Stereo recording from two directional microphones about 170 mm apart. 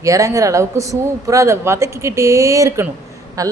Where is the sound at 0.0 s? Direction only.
20° right (ahead or behind).